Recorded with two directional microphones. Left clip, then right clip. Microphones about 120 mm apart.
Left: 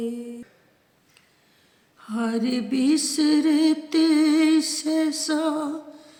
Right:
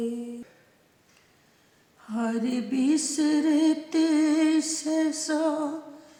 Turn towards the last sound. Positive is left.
turn(degrees=25)  # may be behind; listen again after turning